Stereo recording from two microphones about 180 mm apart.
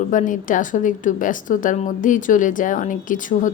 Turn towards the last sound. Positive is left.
turn(degrees=45)  # may be behind; listen again after turning